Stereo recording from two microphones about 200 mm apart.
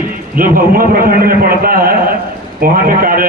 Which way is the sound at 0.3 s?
45° right (ahead or behind).